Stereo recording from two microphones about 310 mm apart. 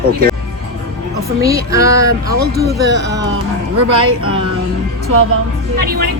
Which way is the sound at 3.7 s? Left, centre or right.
Right.